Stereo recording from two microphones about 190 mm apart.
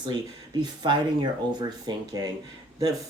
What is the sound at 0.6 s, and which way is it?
Speech, 25° right (ahead or behind).